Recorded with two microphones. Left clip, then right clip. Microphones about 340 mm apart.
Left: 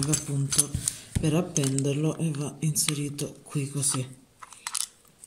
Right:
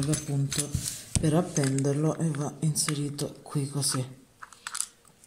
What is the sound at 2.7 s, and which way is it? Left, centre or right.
Speech, centre.